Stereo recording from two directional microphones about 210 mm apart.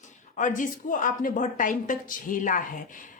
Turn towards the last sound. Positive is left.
turn(degrees=40)  # may be behind; listen again after turning